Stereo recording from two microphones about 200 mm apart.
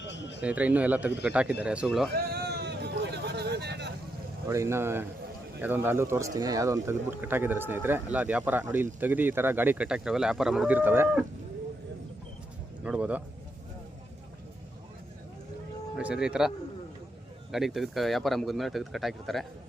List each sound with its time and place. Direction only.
0.0 s a sound: 60° left (ahead or behind)
0.4 s speech: 5° right (ahead or behind)
2.1 s a sound: 50° right (ahead or behind)
4.4 s speech: 15° right (ahead or behind)
12.8 s speech: 5° right (ahead or behind)
16.0 s speech: 5° right (ahead or behind)
17.5 s speech: centre (ahead or behind)